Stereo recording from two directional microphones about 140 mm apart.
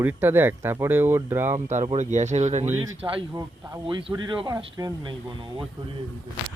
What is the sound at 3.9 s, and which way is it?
Speech, 35° right (ahead or behind).